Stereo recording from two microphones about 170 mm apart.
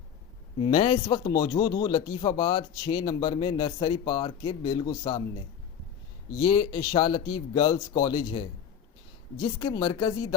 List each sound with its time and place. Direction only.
0.6 s speech: 30° left (ahead or behind)
6.4 s speech: 25° left (ahead or behind)